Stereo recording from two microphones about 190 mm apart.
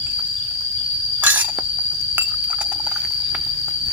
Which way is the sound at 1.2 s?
10° right (ahead or behind).